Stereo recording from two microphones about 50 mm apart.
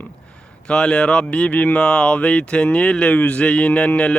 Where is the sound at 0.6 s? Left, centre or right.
Centre.